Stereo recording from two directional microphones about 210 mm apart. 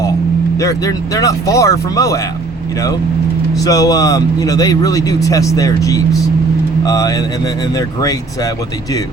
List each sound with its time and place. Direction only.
0.6 s speech: 15° left (ahead or behind)
3.6 s speech: 15° left (ahead or behind)